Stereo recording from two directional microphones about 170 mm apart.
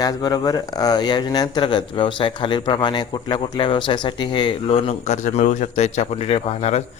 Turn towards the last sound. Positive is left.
turn(degrees=35)  # may be behind; listen again after turning